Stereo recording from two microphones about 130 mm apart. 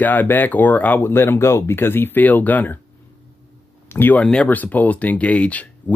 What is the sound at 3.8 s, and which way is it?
Speech, 15° left (ahead or behind).